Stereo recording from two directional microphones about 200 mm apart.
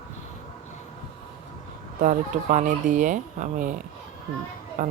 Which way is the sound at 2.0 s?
40° right (ahead or behind).